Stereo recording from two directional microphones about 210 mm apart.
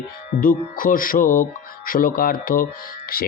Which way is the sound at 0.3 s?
40° left (ahead or behind).